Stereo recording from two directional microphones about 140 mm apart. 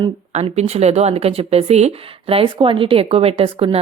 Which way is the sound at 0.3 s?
50° right (ahead or behind).